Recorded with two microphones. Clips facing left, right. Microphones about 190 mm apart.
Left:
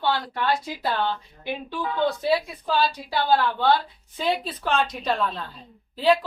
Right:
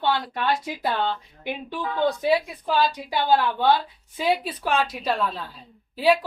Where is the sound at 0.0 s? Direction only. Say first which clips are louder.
Right 1 dB; 20° right (ahead or behind).